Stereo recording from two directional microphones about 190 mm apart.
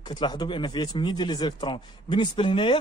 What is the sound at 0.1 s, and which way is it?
Speech, 20° left (ahead or behind).